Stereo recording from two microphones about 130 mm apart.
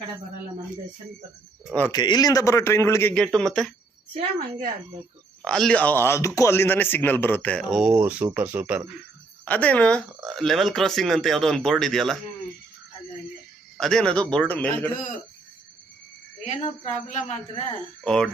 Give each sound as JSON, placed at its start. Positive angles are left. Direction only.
{"t": 1.9, "sound": "a man's voice", "side_deg": 35}
{"t": 3.2, "sound": "speech", "side_deg": 5}
{"t": 4.1, "sound": "a woman's voice", "side_deg": -90}
{"t": 5.5, "sound": "a man's voice", "side_deg": 5}
{"t": 9.4, "sound": "a man's voice", "side_deg": 10}
{"t": 13.7, "sound": "a man's voice", "side_deg": 5}
{"t": 16.8, "sound": "speech", "side_deg": 60}
{"t": 18.0, "sound": "speech", "side_deg": 5}